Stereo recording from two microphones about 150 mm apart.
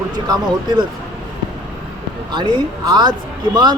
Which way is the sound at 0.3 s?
30° right (ahead or behind).